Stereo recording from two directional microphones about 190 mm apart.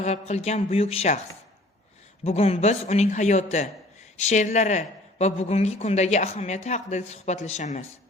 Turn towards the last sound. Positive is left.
turn(degrees=35)  # may be behind; listen again after turning